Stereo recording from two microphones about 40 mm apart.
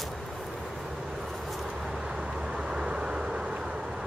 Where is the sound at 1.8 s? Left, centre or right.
Centre.